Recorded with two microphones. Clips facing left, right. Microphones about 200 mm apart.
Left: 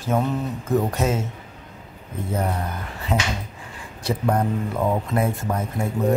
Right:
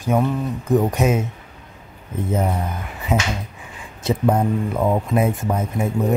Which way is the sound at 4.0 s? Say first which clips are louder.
Right 4 dB; 20° right (ahead or behind).